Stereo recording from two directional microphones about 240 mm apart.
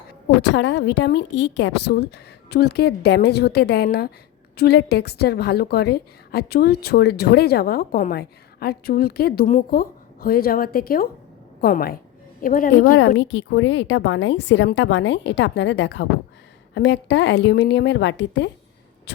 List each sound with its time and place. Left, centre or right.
0.4 s a woman's voice: left
13.1 s a woman's voice: left